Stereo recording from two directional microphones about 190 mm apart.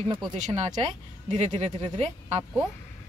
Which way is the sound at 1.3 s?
40° right (ahead or behind).